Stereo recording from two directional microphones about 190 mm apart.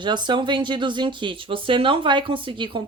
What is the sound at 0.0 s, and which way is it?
Speech, 25° right (ahead or behind).